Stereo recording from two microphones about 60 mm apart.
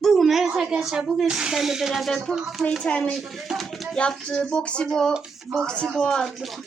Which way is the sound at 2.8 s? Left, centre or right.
Centre.